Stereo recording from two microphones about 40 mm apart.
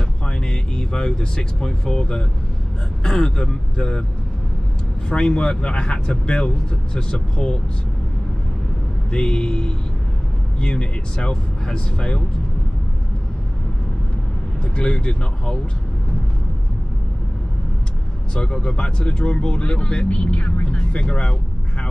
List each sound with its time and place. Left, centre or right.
0.4 s speech: left
5.1 s speech: left
9.1 s speech: left
14.6 s speech: left
18.3 s speech: left